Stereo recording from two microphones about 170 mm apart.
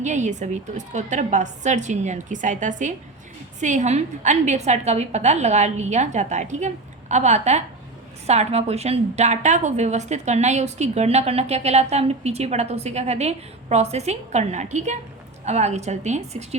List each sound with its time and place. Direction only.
0.0 s a woman's voice: 45° right (ahead or behind)